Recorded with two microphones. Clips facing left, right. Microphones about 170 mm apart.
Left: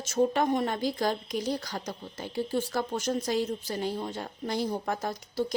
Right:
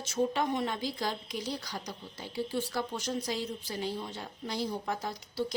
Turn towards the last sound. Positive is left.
turn(degrees=45)  # may be behind; listen again after turning